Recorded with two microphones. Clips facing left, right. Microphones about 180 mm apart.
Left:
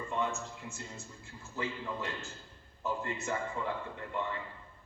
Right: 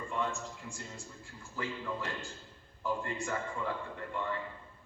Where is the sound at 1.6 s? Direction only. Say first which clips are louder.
Left 2 dB; 20° left (ahead or behind).